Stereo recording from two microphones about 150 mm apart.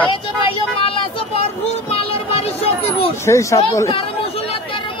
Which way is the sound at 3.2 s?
20° left (ahead or behind).